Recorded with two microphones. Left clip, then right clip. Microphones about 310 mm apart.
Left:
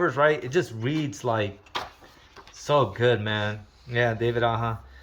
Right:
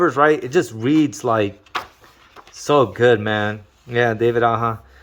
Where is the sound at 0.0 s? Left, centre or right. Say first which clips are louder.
Right 7 dB; centre.